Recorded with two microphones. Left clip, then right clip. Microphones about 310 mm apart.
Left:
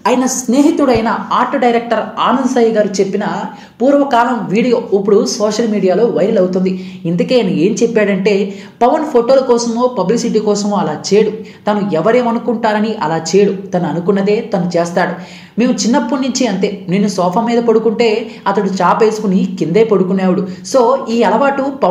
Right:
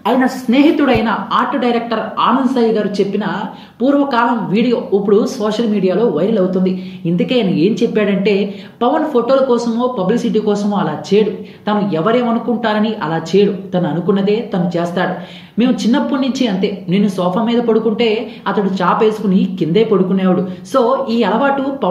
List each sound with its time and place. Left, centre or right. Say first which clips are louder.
0.0 s a woman's voice: left 1 dB; left